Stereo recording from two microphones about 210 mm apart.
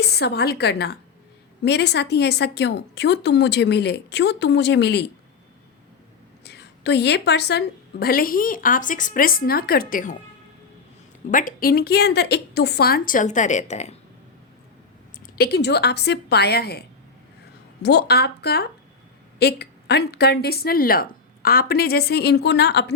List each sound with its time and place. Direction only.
0.0 s a woman's voice: 50° left (ahead or behind)
6.4 s a woman's voice: 50° left (ahead or behind)
11.3 s a woman's voice: 40° left (ahead or behind)
15.4 s a woman's voice: 50° left (ahead or behind)
17.8 s a woman's voice: 50° left (ahead or behind)